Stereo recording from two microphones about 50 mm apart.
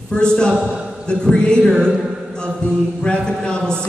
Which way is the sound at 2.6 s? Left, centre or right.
Left.